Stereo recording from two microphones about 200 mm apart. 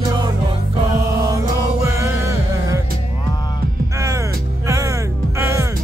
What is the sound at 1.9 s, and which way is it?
Music, 15° right (ahead or behind).